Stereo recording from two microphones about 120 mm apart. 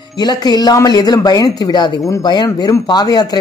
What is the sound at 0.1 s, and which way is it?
Speech, 35° left (ahead or behind).